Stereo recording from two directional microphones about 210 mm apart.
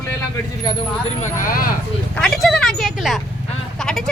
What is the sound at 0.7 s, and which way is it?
Speech, 35° left (ahead or behind).